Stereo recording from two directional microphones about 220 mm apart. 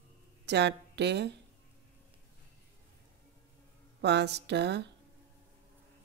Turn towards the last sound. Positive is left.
turn(degrees=-50)  # may be behind; listen again after turning